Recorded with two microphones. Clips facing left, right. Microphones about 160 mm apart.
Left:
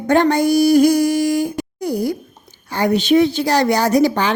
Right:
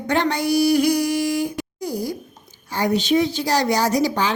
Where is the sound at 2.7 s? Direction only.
60° left (ahead or behind).